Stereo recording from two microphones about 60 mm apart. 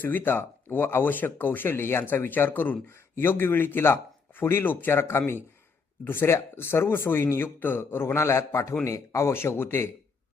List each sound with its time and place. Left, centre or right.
0.0 s speech: left